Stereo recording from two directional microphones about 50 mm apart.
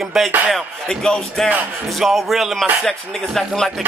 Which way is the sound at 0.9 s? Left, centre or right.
Centre.